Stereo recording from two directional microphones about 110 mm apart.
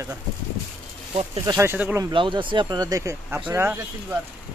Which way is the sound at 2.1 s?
50° right (ahead or behind).